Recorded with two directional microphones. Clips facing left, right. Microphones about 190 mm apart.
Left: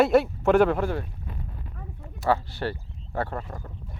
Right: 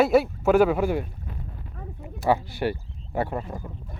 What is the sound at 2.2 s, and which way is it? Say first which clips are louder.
Speech: right 2 dB; 10° right (ahead or behind).